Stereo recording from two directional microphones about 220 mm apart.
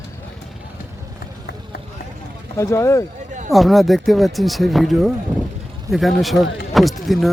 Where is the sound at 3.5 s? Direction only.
Centre (ahead or behind).